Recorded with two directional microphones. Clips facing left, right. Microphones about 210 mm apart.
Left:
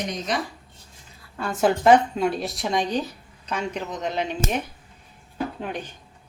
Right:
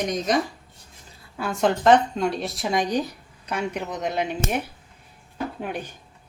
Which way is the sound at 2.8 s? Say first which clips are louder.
Right 1 dB; 15° right (ahead or behind).